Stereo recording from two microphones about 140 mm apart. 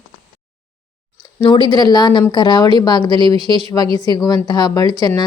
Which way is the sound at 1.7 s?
30° left (ahead or behind).